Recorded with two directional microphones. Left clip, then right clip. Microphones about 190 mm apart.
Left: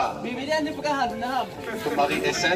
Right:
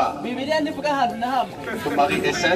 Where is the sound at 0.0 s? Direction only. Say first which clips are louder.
Right 4 dB; 20° right (ahead or behind).